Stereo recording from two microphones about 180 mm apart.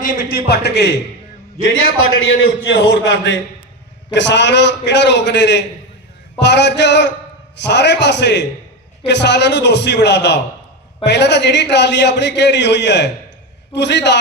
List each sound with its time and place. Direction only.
0.0 s a man's voice: 55° left (ahead or behind); by 0.9 s 70° left (ahead or behind)
1.6 s a man's voice: 90° left; by 14.2 s 75° left (ahead or behind)